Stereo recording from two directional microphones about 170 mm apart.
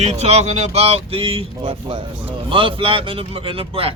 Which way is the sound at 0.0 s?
40° right (ahead or behind).